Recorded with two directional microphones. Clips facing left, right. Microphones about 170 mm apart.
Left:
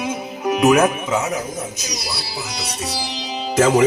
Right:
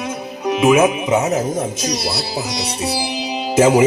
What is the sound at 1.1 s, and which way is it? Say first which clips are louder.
Speech: right 5 dB; 20° right (ahead or behind).